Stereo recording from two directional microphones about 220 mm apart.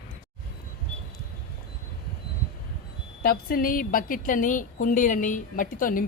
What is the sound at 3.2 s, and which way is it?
A woman's voice, 40° left (ahead or behind).